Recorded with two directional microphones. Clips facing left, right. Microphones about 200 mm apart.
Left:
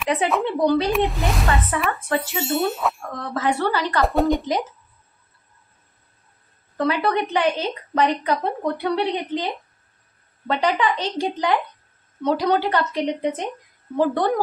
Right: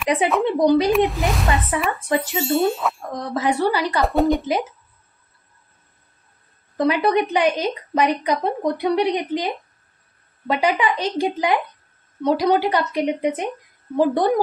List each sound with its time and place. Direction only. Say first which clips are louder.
0.4 s a woman's voice: right 3 dB; 15° right (ahead or behind)
0.9 s speech: right 3 dB; centre (ahead or behind)
1.9 s a woman's voice: right 2 dB; 15° right (ahead or behind)
4.0 s speech: right 1 dB; centre (ahead or behind)
6.8 s a woman's voice: right 3 dB; 15° right (ahead or behind)